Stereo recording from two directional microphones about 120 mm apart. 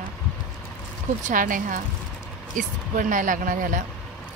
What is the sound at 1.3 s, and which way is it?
Speech, 90° right.